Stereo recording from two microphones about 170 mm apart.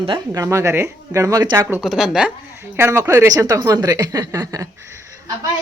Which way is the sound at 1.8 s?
Centre (ahead or behind).